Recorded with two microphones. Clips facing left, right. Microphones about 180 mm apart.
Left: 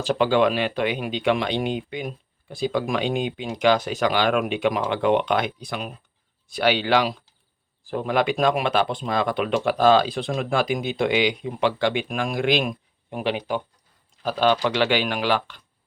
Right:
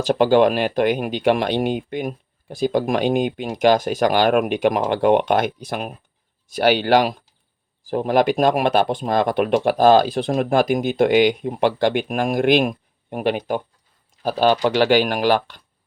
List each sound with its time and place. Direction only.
0.1 s speech: 50° right (ahead or behind)